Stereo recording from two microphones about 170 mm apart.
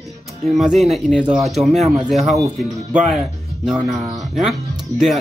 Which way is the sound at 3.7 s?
Centre (ahead or behind).